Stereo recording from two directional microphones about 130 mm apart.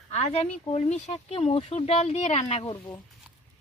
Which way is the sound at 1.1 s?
45° left (ahead or behind).